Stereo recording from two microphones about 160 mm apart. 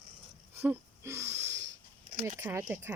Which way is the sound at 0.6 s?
15° right (ahead or behind).